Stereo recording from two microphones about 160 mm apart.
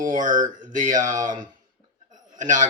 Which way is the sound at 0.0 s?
55° right (ahead or behind).